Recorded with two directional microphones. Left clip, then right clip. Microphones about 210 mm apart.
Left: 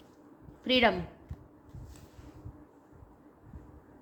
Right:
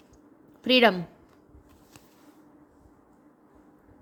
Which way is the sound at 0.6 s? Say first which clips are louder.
Right 5 dB; 45° right (ahead or behind).